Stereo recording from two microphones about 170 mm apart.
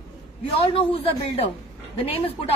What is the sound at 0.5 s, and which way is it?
Speech, 35° left (ahead or behind).